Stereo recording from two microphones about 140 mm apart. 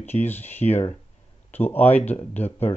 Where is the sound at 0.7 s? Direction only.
50° left (ahead or behind).